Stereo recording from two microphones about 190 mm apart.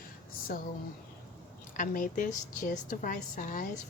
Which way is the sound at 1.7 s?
45° left (ahead or behind).